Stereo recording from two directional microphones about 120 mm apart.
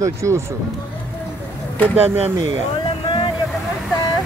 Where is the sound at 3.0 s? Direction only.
45° left (ahead or behind).